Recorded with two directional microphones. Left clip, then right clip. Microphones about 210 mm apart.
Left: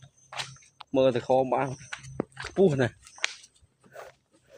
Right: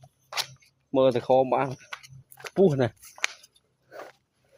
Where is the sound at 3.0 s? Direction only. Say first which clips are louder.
Right 1 dB; 60° right (ahead or behind).